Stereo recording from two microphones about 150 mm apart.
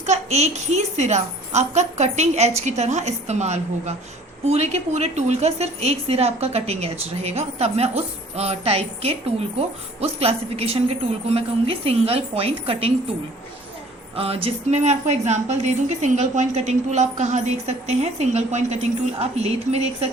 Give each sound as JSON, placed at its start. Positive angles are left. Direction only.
{"t": 0.0, "sound": "a woman's voice", "side_deg": -50}
{"t": 14.2, "sound": "a woman's voice", "side_deg": -40}